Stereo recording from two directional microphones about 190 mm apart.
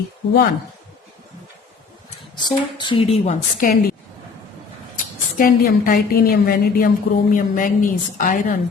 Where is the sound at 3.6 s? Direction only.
45° left (ahead or behind).